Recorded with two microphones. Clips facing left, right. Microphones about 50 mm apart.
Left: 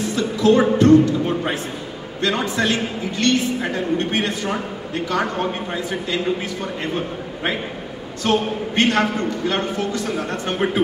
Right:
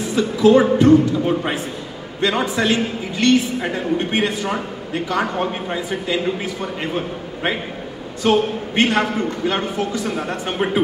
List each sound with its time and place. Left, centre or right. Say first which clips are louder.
0.1 s a man's voice: right 4 dB; centre
8.2 s a man's voice: right 3 dB; centre